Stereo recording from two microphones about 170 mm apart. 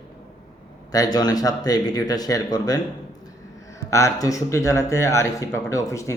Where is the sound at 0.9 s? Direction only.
20° left (ahead or behind).